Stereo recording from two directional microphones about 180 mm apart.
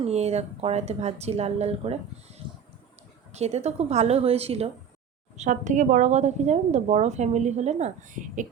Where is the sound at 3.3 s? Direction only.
35° right (ahead or behind).